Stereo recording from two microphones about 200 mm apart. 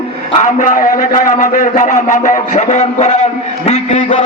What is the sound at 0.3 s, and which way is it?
A man's voice, 40° left (ahead or behind).